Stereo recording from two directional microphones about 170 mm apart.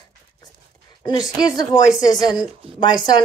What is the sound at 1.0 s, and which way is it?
A woman's voice, 20° left (ahead or behind).